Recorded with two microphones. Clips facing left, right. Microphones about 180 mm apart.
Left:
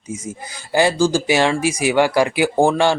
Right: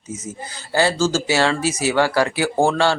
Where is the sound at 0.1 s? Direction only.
10° left (ahead or behind).